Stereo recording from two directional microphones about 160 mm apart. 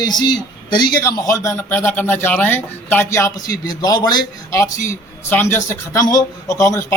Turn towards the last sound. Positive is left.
turn(degrees=20)  # may be behind; listen again after turning